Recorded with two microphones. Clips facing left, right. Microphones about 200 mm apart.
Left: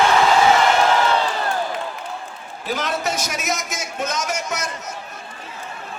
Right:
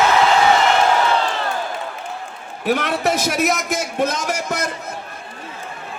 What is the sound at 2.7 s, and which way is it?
A man's voice, 60° right (ahead or behind).